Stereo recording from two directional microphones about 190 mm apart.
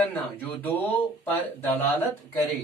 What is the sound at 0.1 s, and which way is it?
Speech, 10° left (ahead or behind).